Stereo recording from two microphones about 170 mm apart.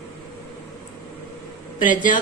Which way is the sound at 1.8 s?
50° left (ahead or behind).